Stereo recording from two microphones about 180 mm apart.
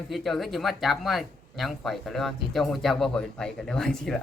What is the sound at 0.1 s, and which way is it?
Speech, centre (ahead or behind).